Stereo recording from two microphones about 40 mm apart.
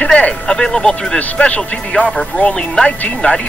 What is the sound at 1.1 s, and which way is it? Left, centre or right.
Speech, left.